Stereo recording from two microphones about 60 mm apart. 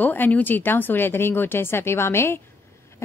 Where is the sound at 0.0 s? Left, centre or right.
Left.